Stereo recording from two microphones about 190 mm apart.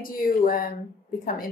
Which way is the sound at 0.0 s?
45° left (ahead or behind).